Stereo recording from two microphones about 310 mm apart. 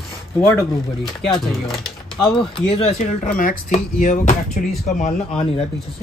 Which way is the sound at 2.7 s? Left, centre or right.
Centre.